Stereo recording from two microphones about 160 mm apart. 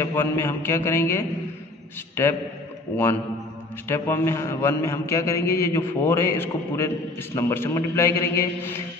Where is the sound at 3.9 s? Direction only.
15° left (ahead or behind).